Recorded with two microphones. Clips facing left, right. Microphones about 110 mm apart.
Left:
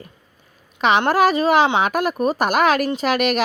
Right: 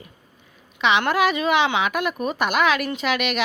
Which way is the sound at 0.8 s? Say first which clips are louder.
Left 4 dB; 40° left (ahead or behind).